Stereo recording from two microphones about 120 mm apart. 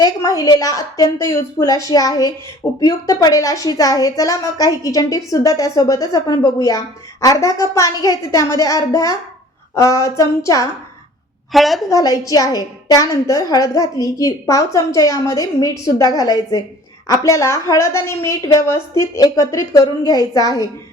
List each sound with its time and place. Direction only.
0.0 s a woman's voice: 30° left (ahead or behind)
11.5 s a woman's voice: centre (ahead or behind)
11.9 s a woman's voice: 30° left (ahead or behind)